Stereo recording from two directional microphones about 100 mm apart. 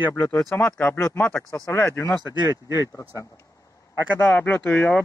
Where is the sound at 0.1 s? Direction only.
25° left (ahead or behind).